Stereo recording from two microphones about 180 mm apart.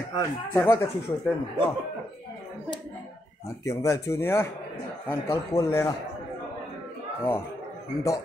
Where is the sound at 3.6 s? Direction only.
15° left (ahead or behind).